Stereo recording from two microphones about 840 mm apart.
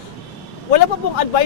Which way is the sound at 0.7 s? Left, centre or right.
Left.